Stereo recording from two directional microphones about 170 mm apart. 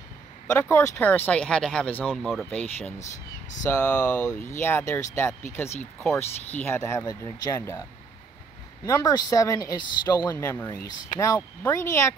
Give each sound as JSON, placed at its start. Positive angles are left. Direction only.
{"t": 0.6, "sound": "speech", "side_deg": 15}
{"t": 8.8, "sound": "speech", "side_deg": 20}